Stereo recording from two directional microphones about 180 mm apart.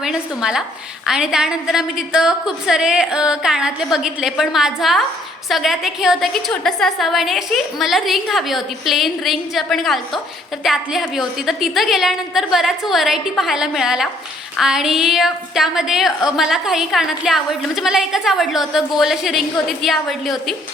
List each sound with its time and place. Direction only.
0.0 s a woman's voice: 5° right (ahead or behind)